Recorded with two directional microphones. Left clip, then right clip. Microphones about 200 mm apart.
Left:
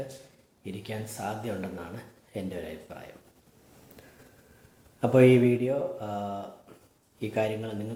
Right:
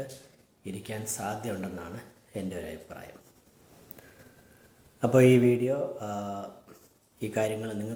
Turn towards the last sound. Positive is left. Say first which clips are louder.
# even
turn(degrees=-15)  # may be behind; listen again after turning